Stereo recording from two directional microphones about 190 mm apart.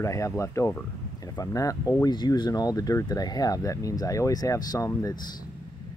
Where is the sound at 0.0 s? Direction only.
15° left (ahead or behind).